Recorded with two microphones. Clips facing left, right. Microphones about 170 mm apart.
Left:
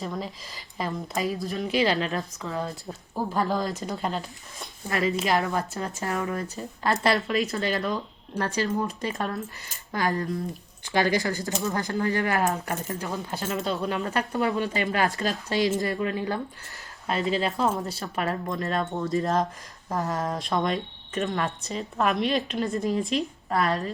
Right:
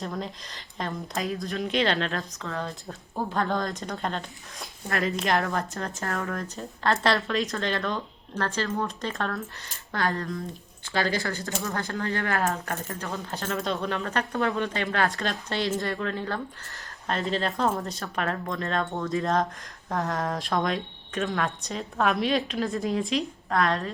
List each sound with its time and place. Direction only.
0.0 s speech: centre (ahead or behind)
13.5 s speech: centre (ahead or behind)
14.8 s speech: 15° left (ahead or behind)